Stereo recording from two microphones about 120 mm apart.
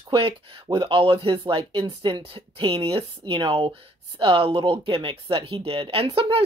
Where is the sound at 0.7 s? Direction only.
45° right (ahead or behind).